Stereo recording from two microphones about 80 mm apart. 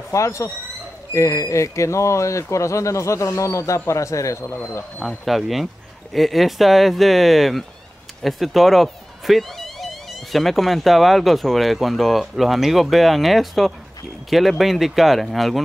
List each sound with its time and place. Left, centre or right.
0.1 s speech: left
5.0 s speech: centre